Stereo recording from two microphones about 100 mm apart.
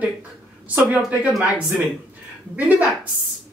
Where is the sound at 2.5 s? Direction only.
15° right (ahead or behind).